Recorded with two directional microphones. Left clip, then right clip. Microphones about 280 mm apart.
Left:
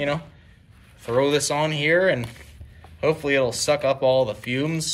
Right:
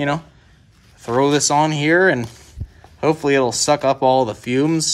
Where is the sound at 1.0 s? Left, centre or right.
Right.